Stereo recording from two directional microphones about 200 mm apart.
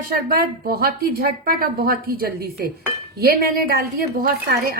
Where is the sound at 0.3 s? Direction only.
50° right (ahead or behind).